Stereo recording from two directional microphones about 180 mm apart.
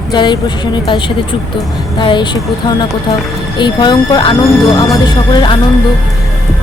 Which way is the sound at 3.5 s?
25° left (ahead or behind).